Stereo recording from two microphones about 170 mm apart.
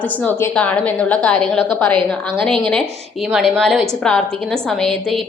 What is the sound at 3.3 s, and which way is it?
A woman's voice, 5° right (ahead or behind).